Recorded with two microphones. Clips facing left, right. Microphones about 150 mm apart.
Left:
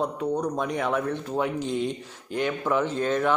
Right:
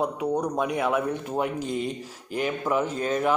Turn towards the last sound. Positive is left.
turn(degrees=-10)  # may be behind; listen again after turning